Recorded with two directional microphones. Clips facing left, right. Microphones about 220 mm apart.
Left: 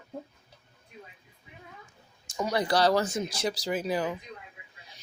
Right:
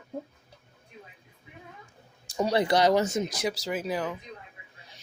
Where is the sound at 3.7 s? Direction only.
Centre (ahead or behind).